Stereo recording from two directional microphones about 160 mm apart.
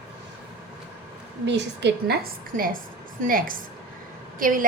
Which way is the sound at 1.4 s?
90° right.